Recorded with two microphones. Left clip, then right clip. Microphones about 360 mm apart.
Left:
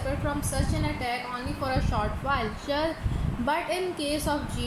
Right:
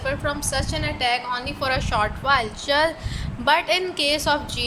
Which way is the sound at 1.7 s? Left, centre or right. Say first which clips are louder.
Right 8 dB; right.